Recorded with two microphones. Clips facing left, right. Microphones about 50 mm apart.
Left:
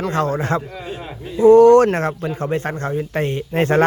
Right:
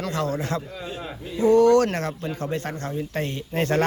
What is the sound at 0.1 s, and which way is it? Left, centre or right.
Speech, left.